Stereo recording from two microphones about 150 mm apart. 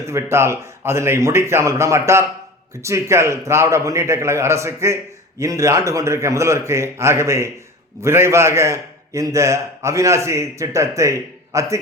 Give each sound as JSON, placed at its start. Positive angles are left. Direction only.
{"t": 0.1, "sound": "a man's voice", "side_deg": -20}